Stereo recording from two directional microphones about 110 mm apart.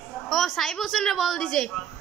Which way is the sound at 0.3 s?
Centre (ahead or behind).